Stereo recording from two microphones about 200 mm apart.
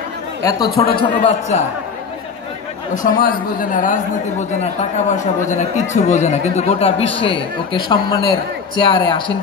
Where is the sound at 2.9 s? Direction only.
45° left (ahead or behind).